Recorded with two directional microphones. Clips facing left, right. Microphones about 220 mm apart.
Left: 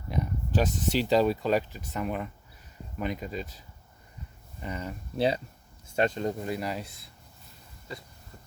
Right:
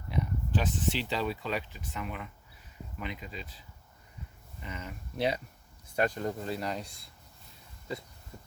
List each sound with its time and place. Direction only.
0.1 s speech: 40° left (ahead or behind)
4.6 s speech: 35° left (ahead or behind); by 7.1 s 5° left (ahead or behind)